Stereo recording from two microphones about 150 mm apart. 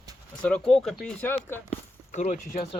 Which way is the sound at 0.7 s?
5° left (ahead or behind).